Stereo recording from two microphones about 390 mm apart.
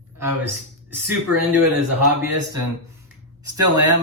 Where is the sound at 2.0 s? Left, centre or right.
Right.